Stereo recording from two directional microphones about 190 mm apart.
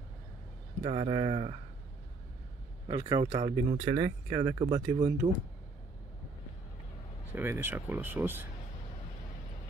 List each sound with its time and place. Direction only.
0.8 s speech: 30° right (ahead or behind)
2.9 s speech: 20° right (ahead or behind)
7.3 s speech: 10° right (ahead or behind)